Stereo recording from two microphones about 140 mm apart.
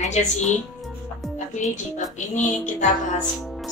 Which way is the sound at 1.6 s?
60° left (ahead or behind).